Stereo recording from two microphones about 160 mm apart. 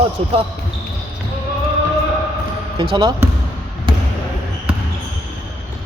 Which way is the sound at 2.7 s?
30° right (ahead or behind).